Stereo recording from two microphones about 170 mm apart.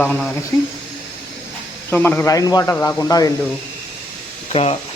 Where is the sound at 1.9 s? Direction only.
10° left (ahead or behind).